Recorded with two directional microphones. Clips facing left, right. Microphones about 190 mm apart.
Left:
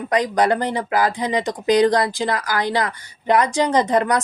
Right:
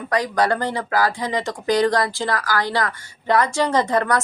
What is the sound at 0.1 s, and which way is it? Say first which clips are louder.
A woman's voice: left 2 dB; 20° left (ahead or behind).